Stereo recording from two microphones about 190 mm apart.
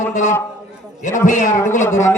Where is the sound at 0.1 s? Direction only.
40° left (ahead or behind).